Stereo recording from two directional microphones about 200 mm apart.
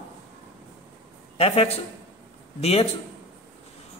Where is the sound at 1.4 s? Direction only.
30° left (ahead or behind).